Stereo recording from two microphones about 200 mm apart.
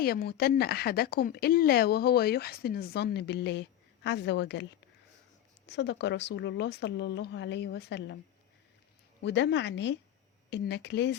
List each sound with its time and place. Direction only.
0.0 s speech: 50° left (ahead or behind)
5.6 s speech: 60° left (ahead or behind)
9.2 s speech: 65° left (ahead or behind)